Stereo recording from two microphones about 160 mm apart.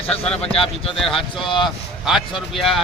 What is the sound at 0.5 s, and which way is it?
Speech, 35° left (ahead or behind).